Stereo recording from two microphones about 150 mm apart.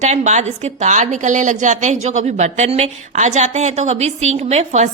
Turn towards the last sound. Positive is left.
turn(degrees=-50)  # may be behind; listen again after turning